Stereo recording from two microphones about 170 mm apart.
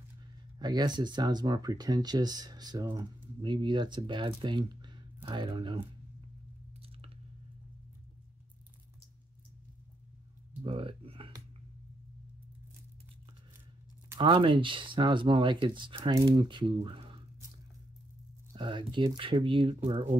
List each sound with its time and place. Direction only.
0.6 s speech: 25° right (ahead or behind)
10.5 s music: 35° right (ahead or behind)
14.1 s speech: 30° right (ahead or behind)
18.5 s speech: 30° right (ahead or behind)